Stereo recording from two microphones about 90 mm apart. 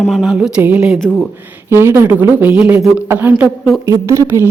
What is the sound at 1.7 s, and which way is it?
Speech, 30° right (ahead or behind).